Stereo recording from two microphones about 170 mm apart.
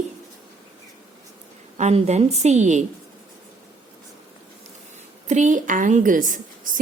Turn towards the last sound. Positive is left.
turn(degrees=-50)  # may be behind; listen again after turning